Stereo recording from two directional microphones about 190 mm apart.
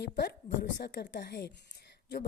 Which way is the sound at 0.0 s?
60° left (ahead or behind).